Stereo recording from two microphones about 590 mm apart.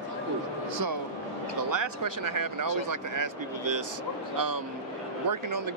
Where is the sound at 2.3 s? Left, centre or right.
Right.